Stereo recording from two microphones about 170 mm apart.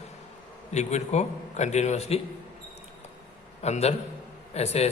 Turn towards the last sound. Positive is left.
turn(degrees=40)  # may be behind; listen again after turning